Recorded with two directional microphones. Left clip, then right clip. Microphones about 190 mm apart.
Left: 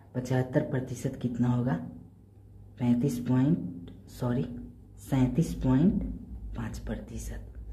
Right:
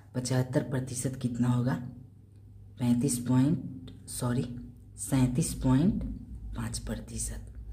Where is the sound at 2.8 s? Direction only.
15° right (ahead or behind).